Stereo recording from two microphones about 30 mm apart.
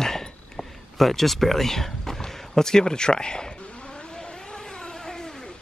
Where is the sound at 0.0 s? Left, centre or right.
Centre.